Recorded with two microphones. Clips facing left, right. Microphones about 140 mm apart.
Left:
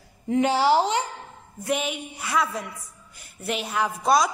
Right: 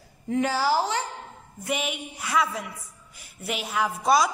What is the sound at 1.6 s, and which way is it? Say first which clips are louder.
A woman's voice: left 3 dB; centre (ahead or behind).